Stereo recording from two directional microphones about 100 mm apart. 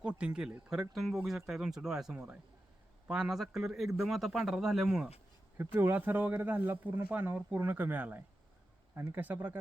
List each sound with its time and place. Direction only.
0.0 s a man's voice: 10° right (ahead or behind)
5.5 s speech: 25° right (ahead or behind)